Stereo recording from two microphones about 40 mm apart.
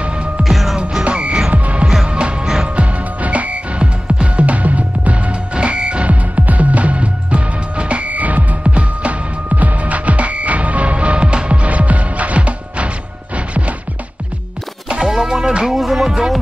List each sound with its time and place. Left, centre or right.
0.4 s music: centre
1.0 s music: right
2.4 s music: centre
2.7 s music: right
5.5 s music: right
15.0 s music: centre